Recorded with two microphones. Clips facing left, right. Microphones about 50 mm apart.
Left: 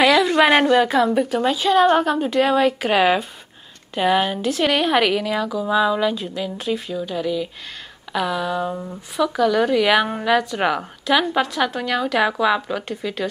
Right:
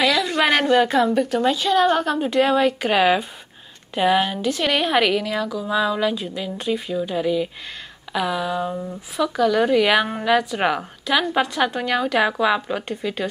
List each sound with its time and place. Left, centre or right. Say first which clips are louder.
0.0 s a sound: left 4 dB; centre
0.7 s a woman's voice: left 1 dB; centre
2.0 s a woman's voice: left 1 dB; centre